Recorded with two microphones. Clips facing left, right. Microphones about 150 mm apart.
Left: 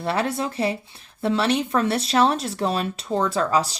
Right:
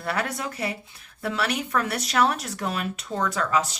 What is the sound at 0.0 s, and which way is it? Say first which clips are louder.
Speech: left 5 dB; 25° left (ahead or behind).